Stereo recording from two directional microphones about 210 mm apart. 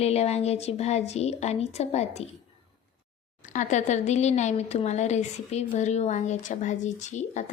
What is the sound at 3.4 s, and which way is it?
Speech, 35° left (ahead or behind).